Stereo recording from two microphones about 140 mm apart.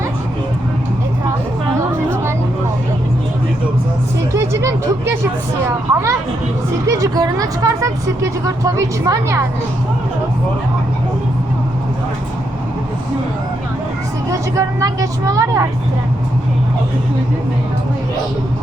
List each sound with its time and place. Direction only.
4.4 s speech: 20° right (ahead or behind)
14.3 s speech: 25° right (ahead or behind)